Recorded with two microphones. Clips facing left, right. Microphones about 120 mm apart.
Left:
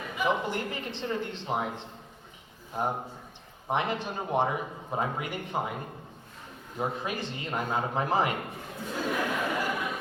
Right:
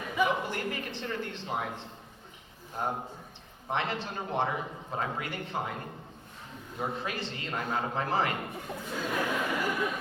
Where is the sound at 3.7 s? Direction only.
15° left (ahead or behind).